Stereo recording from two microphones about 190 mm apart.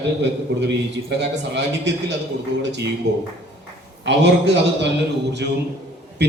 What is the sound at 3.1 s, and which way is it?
A man's voice, 65° right (ahead or behind).